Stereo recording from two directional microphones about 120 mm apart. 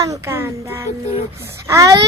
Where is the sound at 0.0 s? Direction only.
25° right (ahead or behind).